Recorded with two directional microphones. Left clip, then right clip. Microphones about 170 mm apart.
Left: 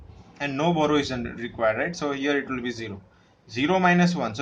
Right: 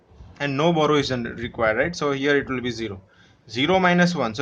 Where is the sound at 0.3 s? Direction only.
45° right (ahead or behind).